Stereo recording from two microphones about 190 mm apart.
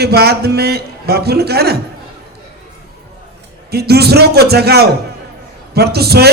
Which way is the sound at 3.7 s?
55° right (ahead or behind).